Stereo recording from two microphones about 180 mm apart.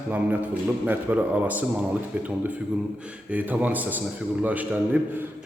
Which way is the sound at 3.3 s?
10° right (ahead or behind).